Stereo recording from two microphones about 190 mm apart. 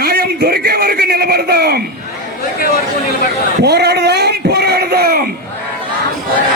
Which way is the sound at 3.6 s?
60° right (ahead or behind).